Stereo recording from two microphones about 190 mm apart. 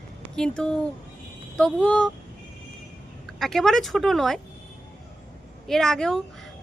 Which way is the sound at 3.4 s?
Centre (ahead or behind).